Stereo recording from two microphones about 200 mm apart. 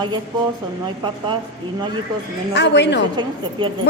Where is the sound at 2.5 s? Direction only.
60° left (ahead or behind).